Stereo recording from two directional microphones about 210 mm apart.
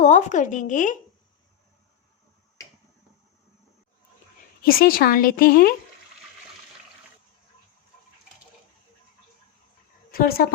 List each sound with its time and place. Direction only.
0.0 s speech: 35° left (ahead or behind)
4.6 s speech: 45° left (ahead or behind)
10.1 s a woman's voice: 45° left (ahead or behind)